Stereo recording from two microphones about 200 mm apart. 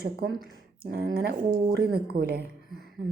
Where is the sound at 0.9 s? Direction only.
50° right (ahead or behind).